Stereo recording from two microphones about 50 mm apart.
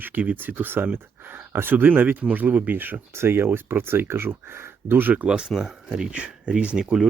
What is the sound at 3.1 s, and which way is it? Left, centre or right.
Speech, right.